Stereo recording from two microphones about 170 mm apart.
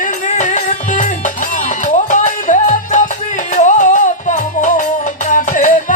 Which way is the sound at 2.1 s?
50° left (ahead or behind).